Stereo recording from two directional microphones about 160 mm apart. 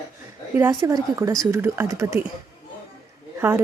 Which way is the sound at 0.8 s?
20° right (ahead or behind).